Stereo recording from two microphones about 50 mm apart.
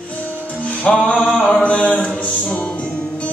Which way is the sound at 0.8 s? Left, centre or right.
Left.